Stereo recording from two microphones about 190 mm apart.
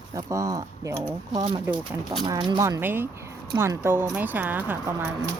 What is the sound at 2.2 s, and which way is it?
Speech, 25° right (ahead or behind).